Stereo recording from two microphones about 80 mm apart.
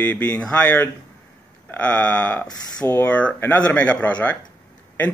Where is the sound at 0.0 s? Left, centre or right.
Left.